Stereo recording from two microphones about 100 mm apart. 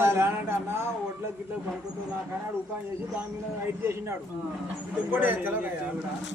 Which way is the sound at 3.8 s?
25° right (ahead or behind).